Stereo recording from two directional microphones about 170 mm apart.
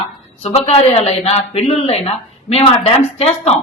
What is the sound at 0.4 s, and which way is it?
Speech, 35° left (ahead or behind).